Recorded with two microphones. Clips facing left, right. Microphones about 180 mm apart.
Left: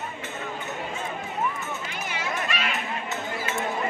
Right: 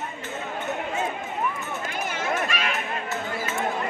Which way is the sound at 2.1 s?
50° right (ahead or behind).